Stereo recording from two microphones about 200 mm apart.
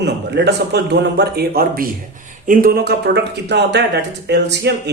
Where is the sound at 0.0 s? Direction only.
55° right (ahead or behind).